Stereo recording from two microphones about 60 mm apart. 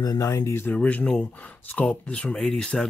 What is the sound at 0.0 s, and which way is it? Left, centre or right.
Speech, left.